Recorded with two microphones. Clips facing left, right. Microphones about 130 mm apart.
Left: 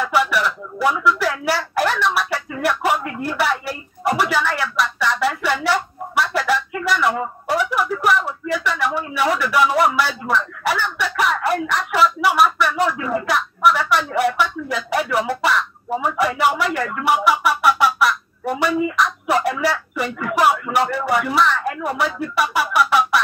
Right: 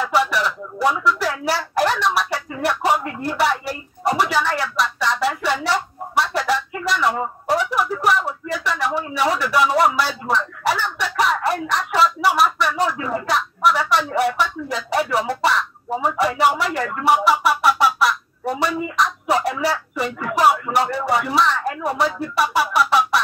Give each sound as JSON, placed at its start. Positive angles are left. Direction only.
{"t": 0.0, "sound": "speech", "side_deg": -35}
{"t": 4.2, "sound": "a sound", "side_deg": -35}
{"t": 9.9, "sound": "speech", "side_deg": -35}